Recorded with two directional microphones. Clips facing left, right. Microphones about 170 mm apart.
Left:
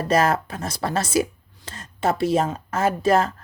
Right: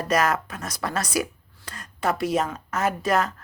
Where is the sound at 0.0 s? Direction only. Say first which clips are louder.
Left 3 dB; 30° left (ahead or behind).